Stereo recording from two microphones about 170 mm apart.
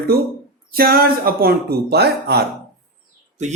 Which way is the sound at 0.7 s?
60° right (ahead or behind).